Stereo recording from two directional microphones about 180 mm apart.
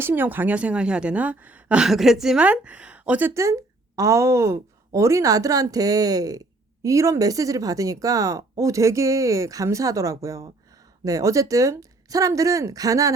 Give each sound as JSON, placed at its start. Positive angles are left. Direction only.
{"t": 0.0, "sound": "a woman's voice", "side_deg": -10}